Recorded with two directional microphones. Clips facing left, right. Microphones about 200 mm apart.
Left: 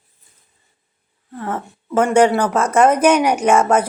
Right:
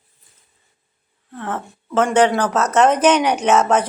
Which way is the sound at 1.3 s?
10° left (ahead or behind).